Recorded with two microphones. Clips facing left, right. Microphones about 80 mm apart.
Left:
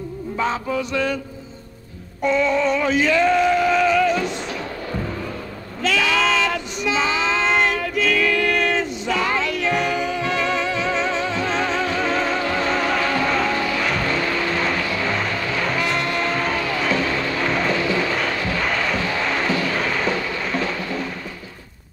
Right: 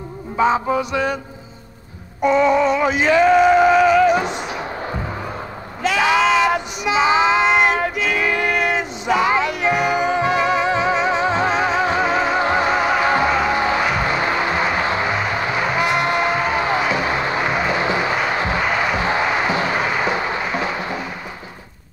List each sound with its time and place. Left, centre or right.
0.4 s music: centre
2.2 s male singing: centre
5.8 s a sound: right
6.2 s child singing: centre
8.1 s music: right
16.8 s vehicle: centre